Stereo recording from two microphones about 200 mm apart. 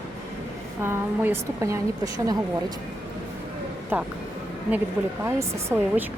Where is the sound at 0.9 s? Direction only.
10° right (ahead or behind).